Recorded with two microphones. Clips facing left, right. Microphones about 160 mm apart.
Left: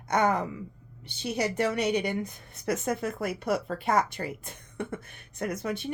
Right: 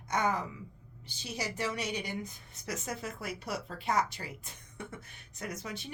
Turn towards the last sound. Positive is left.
turn(degrees=55)  # may be behind; listen again after turning